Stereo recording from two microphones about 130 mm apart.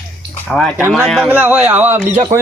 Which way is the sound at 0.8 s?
15° right (ahead or behind).